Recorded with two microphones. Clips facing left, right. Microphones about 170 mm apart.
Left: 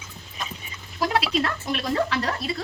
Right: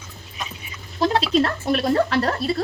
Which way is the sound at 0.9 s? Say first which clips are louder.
Right 5 dB; 30° right (ahead or behind).